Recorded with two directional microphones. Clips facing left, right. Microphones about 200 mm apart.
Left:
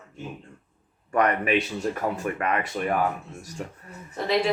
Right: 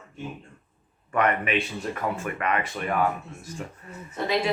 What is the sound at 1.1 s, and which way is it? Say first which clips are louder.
Speech: left 2 dB; 40° left (ahead or behind).